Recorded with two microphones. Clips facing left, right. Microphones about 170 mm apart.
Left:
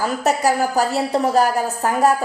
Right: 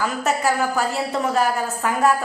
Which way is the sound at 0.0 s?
40° left (ahead or behind).